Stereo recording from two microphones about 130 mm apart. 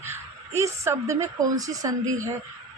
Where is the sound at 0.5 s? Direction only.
20° right (ahead or behind).